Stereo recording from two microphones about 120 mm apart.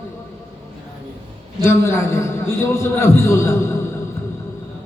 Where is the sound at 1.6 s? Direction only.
25° left (ahead or behind).